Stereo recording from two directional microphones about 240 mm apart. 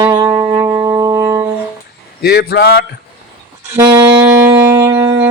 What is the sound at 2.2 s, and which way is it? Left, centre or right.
Speech, left.